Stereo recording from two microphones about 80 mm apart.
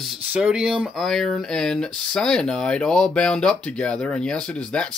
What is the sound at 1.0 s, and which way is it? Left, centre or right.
Speech, centre.